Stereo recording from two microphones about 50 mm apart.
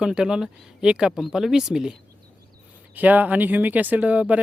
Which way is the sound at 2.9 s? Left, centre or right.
Right.